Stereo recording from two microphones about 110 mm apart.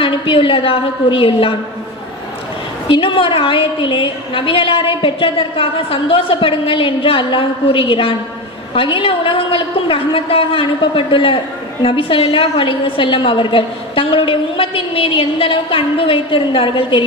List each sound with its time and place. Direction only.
0.0 s a woman's voice: 50° left (ahead or behind)
2.9 s a woman's voice: 50° left (ahead or behind)